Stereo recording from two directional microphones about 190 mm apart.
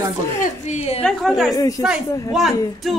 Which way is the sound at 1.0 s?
Centre (ahead or behind).